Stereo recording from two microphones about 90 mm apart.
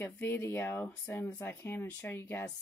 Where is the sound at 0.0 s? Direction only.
25° left (ahead or behind).